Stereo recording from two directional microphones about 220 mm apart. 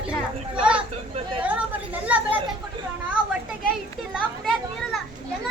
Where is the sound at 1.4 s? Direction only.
5° right (ahead or behind).